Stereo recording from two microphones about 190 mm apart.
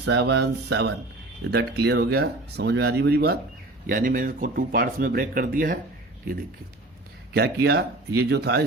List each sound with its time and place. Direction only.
0.0 s speech: 65° right (ahead or behind)
3.8 s speech: 45° right (ahead or behind)
7.3 s speech: 60° right (ahead or behind)